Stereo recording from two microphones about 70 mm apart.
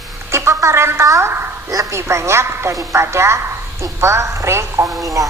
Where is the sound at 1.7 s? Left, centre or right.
Right.